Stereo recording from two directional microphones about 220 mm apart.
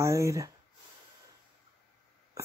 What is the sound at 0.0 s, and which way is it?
Speech, 15° right (ahead or behind).